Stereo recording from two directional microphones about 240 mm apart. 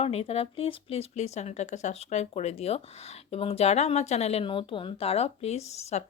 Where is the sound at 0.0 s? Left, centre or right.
Left.